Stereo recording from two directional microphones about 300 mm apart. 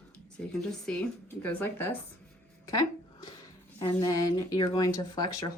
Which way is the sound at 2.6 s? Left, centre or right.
Centre.